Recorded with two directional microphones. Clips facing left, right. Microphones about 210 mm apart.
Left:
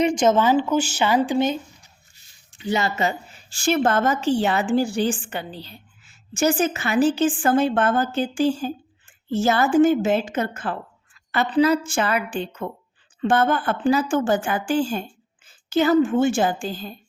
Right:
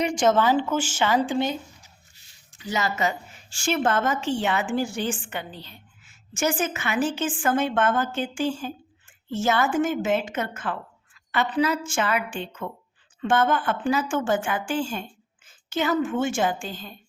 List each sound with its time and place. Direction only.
0.0 s a woman's voice: 20° left (ahead or behind)